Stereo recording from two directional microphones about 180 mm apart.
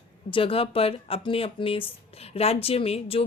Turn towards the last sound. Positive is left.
turn(degrees=30)  # may be behind; listen again after turning